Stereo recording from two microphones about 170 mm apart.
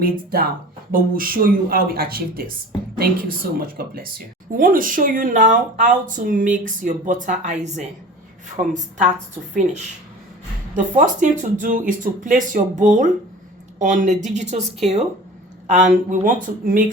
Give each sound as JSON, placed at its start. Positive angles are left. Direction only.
{"t": 0.0, "sound": "speech", "side_deg": -60}
{"t": 10.8, "sound": "speech", "side_deg": -50}